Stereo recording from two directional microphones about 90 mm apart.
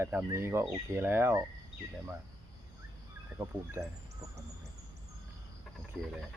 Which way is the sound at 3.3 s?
30° right (ahead or behind).